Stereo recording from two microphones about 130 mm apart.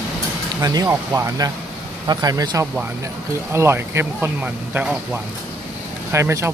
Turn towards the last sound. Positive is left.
turn(degrees=-20)  # may be behind; listen again after turning